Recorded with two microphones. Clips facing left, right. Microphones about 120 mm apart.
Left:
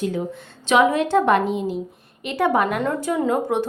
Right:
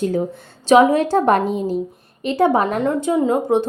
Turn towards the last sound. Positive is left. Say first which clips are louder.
# right 4 dB
turn(degrees=-25)  # may be behind; listen again after turning